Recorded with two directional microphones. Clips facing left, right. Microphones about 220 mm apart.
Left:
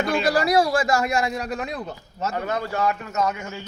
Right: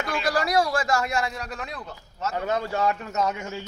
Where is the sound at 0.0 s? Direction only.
30° left (ahead or behind).